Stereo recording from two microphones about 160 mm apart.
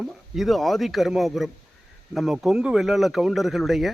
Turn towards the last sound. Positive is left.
turn(degrees=0)  # may be behind; listen again after turning